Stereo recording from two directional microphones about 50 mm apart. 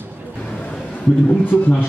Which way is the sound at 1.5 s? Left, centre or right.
Left.